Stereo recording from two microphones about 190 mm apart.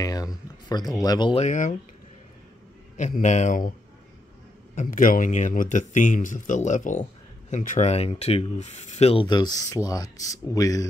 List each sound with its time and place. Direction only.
0.0 s speech: 20° left (ahead or behind)
1.4 s speech: 40° left (ahead or behind)
3.0 s speech: 40° left (ahead or behind)
4.7 s speech: 45° left (ahead or behind); by 10.9 s 20° left (ahead or behind)